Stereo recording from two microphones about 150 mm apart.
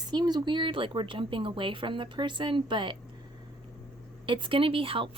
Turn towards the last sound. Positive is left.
turn(degrees=-35)  # may be behind; listen again after turning